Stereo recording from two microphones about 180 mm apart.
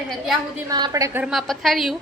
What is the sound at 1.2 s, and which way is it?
Speech, centre (ahead or behind).